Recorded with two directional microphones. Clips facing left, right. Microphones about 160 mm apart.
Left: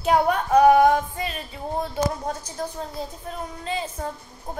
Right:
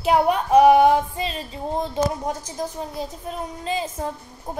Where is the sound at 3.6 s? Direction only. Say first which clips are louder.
Right 3 dB; 25° right (ahead or behind).